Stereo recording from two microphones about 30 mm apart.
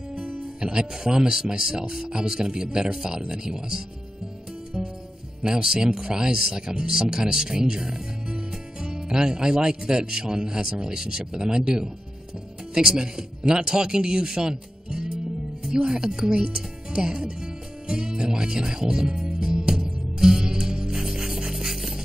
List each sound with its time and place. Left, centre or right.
0.6 s speech: right
4.7 s music: centre
5.4 s speech: right
19.4 s music: right
20.2 s music: centre